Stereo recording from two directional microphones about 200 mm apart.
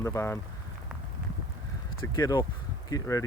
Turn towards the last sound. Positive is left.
turn(degrees=15)  # may be behind; listen again after turning